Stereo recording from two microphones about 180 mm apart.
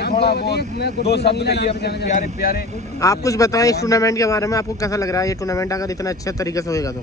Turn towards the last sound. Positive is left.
turn(degrees=20)  # may be behind; listen again after turning